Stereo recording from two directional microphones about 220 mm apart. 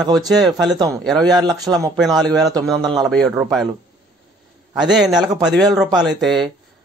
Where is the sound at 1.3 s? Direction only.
20° right (ahead or behind).